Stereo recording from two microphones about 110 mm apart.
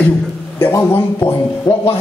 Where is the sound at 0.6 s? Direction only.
30° left (ahead or behind).